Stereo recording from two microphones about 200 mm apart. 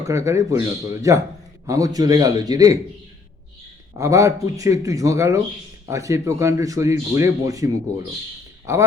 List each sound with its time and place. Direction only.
0.1 s a man's voice: 15° right (ahead or behind)
3.9 s speech: 15° right (ahead or behind)